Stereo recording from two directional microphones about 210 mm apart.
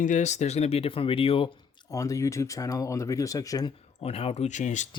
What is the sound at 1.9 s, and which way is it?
Speech, 15° left (ahead or behind).